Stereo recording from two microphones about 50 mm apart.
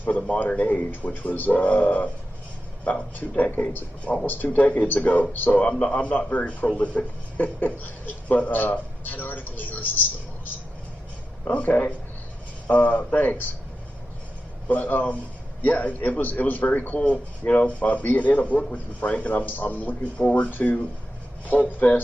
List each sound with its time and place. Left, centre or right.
0.3 s speech: left
3.2 s speech: left
11.4 s a man's voice: left
13.1 s speech: left
14.7 s speech: left